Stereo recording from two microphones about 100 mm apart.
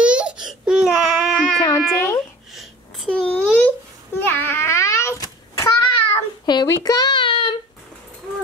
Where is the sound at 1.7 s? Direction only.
25° left (ahead or behind).